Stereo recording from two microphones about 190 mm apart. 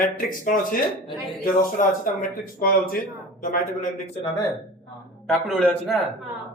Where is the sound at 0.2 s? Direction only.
45° left (ahead or behind).